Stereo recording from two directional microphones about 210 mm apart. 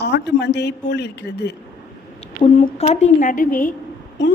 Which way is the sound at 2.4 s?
30° left (ahead or behind).